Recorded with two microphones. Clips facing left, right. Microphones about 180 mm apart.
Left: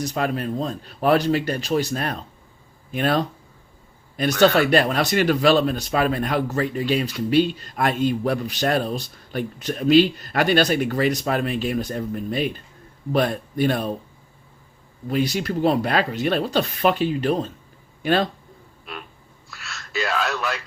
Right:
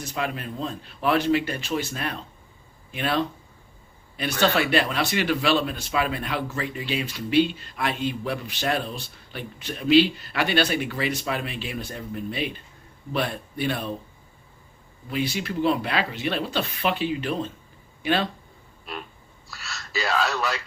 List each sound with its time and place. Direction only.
0.0 s speech: 40° left (ahead or behind)
15.1 s speech: 40° left (ahead or behind)
19.5 s speech: centre (ahead or behind)